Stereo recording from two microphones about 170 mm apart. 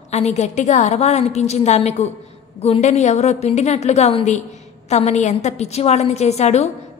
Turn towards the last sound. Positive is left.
turn(degrees=40)  # may be behind; listen again after turning